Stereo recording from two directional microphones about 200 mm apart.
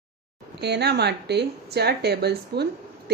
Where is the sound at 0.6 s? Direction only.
55° right (ahead or behind).